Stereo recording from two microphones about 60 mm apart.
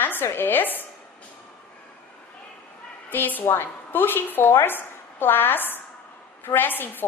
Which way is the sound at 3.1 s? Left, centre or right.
Left.